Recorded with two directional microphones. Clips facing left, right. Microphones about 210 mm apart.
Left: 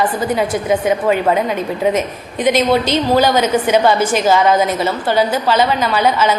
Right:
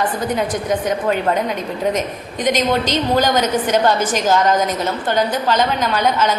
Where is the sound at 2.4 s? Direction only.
10° left (ahead or behind).